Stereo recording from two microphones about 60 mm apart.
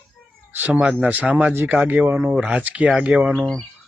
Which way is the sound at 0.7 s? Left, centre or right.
Centre.